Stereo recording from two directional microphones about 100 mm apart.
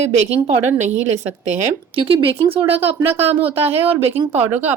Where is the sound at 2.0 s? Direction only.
65° right (ahead or behind).